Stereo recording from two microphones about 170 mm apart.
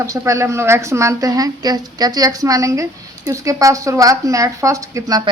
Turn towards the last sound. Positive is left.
turn(degrees=-20)  # may be behind; listen again after turning